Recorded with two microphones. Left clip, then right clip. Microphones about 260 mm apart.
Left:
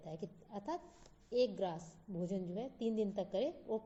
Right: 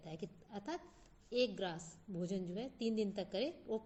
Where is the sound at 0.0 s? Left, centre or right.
Right.